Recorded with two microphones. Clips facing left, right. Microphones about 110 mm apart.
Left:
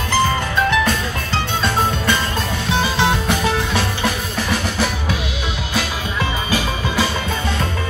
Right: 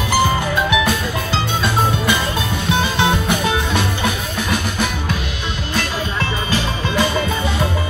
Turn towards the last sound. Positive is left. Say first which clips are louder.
# right 1 dB
turn(degrees=5)  # may be behind; listen again after turning